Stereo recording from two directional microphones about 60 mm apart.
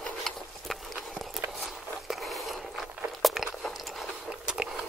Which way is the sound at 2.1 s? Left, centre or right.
Centre.